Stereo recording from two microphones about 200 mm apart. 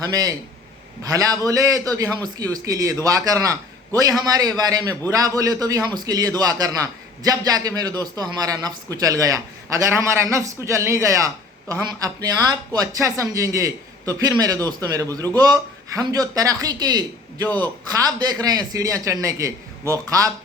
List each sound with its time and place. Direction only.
0.0 s a man's voice: 20° right (ahead or behind)